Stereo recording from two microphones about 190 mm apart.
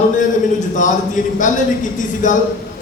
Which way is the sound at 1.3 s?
40° left (ahead or behind).